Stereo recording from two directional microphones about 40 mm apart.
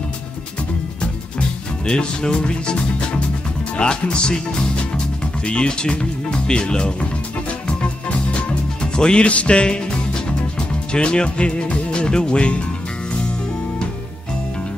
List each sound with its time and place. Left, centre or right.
1.9 s speech: left
7.6 s music: left
8.9 s speech: left
10.9 s speech: left